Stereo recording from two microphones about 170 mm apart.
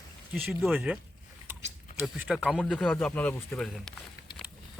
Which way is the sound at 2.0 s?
10° right (ahead or behind).